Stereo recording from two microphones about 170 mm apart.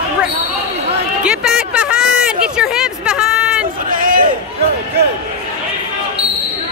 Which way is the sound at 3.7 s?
55° right (ahead or behind).